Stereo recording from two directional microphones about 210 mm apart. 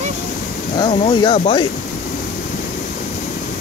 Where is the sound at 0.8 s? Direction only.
20° left (ahead or behind).